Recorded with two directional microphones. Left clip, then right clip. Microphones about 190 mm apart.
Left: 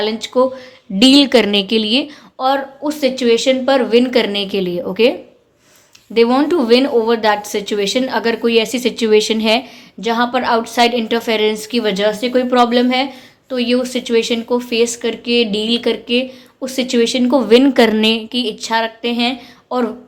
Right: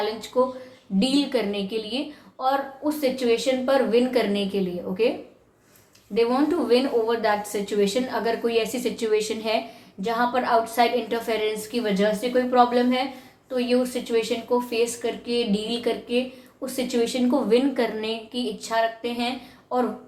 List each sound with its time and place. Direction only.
0.0 s speech: 50° left (ahead or behind)
6.1 s speech: 50° left (ahead or behind)